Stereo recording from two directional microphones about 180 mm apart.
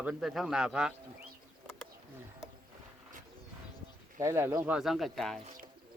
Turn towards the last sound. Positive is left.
turn(degrees=0)  # may be behind; listen again after turning